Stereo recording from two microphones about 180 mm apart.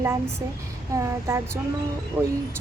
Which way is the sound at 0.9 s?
15° right (ahead or behind).